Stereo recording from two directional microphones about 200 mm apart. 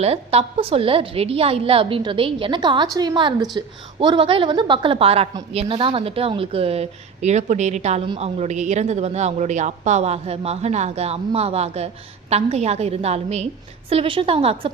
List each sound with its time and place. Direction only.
0.0 s a woman's voice: 30° right (ahead or behind)